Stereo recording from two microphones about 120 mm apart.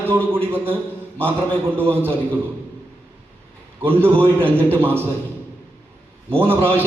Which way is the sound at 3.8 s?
20° right (ahead or behind).